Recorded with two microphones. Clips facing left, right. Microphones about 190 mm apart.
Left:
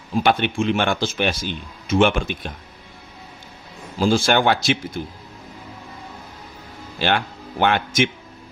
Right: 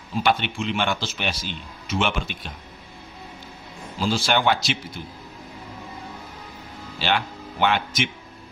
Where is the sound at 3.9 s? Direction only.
50° left (ahead or behind).